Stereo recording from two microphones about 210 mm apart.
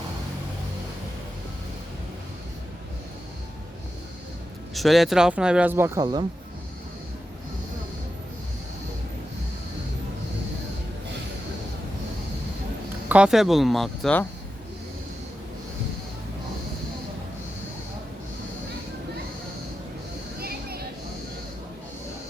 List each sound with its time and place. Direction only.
4.7 s speech: centre (ahead or behind); by 6.2 s 20° right (ahead or behind)
13.1 s speech: 5° right (ahead or behind)
20.4 s a sound: 45° right (ahead or behind)